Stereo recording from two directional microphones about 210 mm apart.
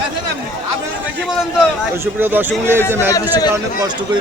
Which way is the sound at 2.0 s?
10° right (ahead or behind).